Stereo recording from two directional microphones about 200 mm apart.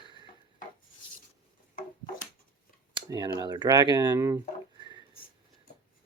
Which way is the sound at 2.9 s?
20° right (ahead or behind).